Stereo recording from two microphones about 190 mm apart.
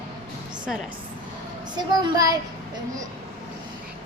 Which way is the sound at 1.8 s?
20° right (ahead or behind).